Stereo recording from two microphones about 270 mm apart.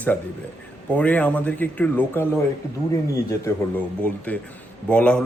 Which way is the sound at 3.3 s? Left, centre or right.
Centre.